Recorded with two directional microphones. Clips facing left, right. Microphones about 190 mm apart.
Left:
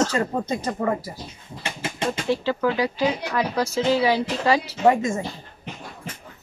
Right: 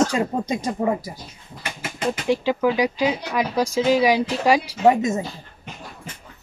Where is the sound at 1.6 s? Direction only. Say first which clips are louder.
Left 2 dB; 30° left (ahead or behind).